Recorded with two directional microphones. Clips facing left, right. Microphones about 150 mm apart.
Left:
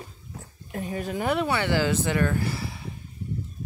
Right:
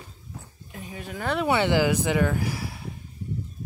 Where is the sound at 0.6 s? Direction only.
55° left (ahead or behind).